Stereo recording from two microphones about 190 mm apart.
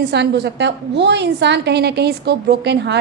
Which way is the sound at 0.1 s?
60° right (ahead or behind).